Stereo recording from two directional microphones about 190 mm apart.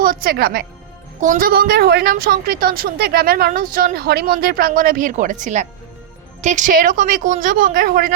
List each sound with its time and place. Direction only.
0.0 s a woman's voice: 50° right (ahead or behind)